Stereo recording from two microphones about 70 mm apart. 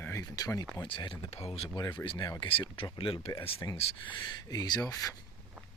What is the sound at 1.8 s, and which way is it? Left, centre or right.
Speech, left.